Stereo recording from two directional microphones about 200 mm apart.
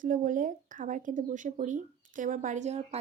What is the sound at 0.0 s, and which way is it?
Speech, 40° right (ahead or behind).